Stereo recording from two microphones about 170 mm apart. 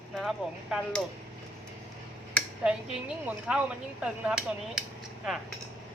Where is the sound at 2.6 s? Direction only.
5° right (ahead or behind).